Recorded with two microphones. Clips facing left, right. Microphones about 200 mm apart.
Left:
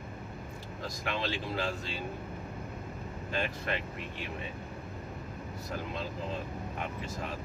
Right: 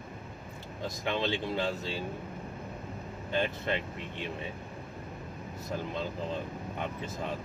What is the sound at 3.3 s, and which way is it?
Speech, 20° right (ahead or behind).